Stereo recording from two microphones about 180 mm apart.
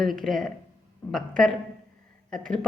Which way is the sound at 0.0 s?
Centre (ahead or behind).